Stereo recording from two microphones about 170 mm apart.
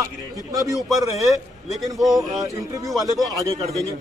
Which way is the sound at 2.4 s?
20° right (ahead or behind).